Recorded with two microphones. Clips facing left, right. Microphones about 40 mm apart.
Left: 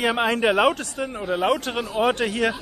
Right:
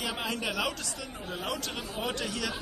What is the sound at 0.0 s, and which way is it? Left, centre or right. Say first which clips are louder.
Speech: left 12 dB; left.